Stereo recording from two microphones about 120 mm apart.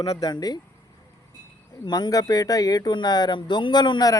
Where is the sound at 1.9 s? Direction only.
30° left (ahead or behind).